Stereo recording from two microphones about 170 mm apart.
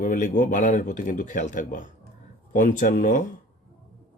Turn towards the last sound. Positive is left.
turn(degrees=50)  # may be behind; listen again after turning